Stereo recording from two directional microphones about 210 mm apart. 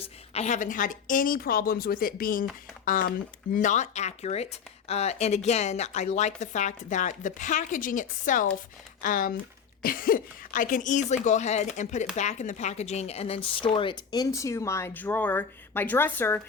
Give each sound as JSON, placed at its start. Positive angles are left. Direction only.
{"t": 0.0, "sound": "a woman's voice", "side_deg": 30}